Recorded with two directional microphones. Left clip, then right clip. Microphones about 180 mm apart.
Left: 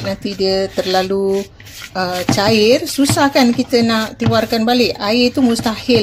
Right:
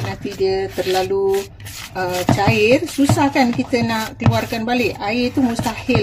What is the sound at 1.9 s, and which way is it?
Speech, 30° left (ahead or behind).